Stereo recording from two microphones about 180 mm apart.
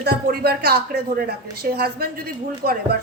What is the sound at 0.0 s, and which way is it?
A woman's voice, 60° right (ahead or behind).